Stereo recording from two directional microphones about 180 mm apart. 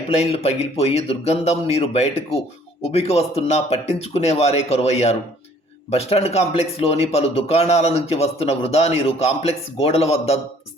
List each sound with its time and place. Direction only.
0.1 s speech: 35° left (ahead or behind)